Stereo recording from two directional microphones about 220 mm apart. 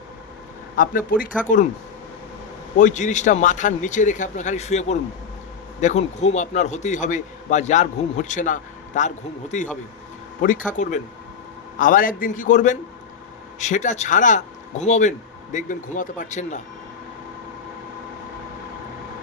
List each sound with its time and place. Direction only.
0.8 s a man's voice: 40° left (ahead or behind)
2.7 s a man's voice: 35° left (ahead or behind)